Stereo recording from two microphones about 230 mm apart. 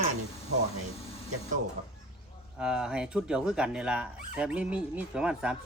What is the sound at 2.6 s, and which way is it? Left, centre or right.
Speech, centre.